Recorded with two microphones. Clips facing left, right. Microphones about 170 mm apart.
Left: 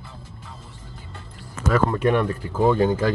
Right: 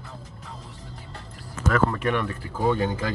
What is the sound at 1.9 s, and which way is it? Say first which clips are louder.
Speech: left 5 dB; 35° left (ahead or behind).